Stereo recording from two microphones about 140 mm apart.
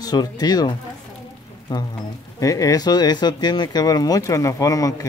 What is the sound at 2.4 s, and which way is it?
Speech, 25° left (ahead or behind).